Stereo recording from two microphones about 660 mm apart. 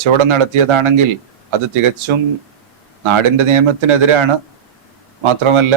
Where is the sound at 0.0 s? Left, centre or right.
Right.